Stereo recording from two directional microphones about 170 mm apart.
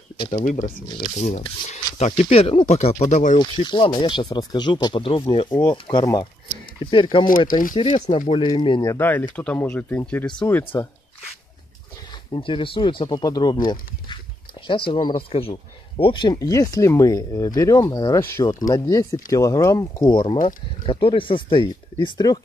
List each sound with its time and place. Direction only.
0.3 s speech: 50° left (ahead or behind)
0.8 s speech: 30° left (ahead or behind)
1.1 s speech: 40° left (ahead or behind)
3.3 s speech: 25° left (ahead or behind)
7.2 s speech: 55° left (ahead or behind)
7.7 s speech: 35° left (ahead or behind)
8.8 s speech: 15° left (ahead or behind)
12.1 s speech: 30° left (ahead or behind)